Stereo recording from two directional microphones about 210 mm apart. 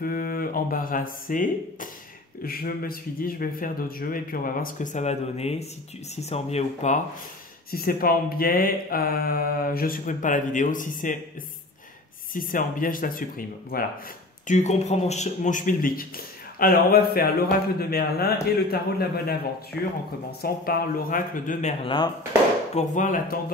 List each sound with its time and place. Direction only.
0.0 s speech: 45° left (ahead or behind)
2.4 s mantra: 45° left (ahead or behind)
6.2 s speech: 30° left (ahead or behind)
7.7 s mantra: 45° left (ahead or behind)
12.4 s speech: 40° left (ahead or behind)
14.5 s speech: 35° left (ahead or behind)
16.5 s mantra: 45° left (ahead or behind)
19.7 s speech: centre (ahead or behind)
20.2 s speech: 45° left (ahead or behind)